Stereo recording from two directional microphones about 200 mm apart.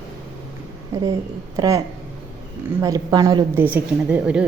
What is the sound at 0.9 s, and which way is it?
Speech, 15° right (ahead or behind).